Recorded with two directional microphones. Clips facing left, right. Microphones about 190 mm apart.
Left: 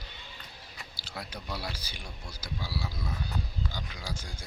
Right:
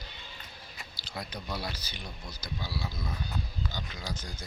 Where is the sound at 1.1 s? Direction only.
10° left (ahead or behind).